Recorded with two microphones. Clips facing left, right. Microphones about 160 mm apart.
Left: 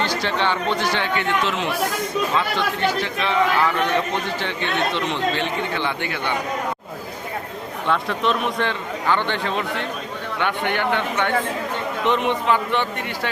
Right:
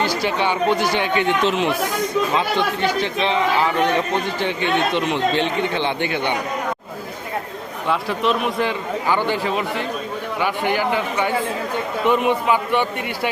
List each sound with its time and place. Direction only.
0.0 s speech: 10° right (ahead or behind)
7.9 s speech: 5° right (ahead or behind)